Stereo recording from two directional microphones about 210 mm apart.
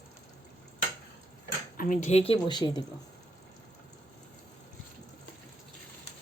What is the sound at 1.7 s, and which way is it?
Speech, 40° left (ahead or behind).